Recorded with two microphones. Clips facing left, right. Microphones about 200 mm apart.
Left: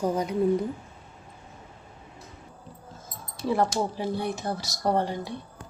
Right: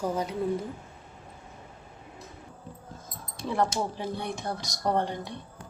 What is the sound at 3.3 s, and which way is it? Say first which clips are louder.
Speech: left 3 dB; 5° left (ahead or behind).